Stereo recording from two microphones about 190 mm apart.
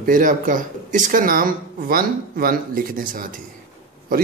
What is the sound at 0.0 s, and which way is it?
Speech, 45° right (ahead or behind).